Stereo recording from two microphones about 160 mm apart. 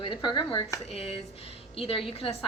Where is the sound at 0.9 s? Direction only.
40° left (ahead or behind).